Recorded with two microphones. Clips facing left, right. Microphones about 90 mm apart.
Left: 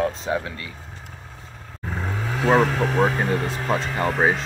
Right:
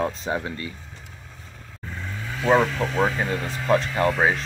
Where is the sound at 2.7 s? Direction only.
60° left (ahead or behind).